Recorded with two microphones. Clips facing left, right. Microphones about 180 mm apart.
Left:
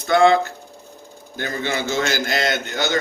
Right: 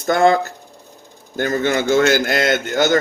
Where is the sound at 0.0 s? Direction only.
45° right (ahead or behind).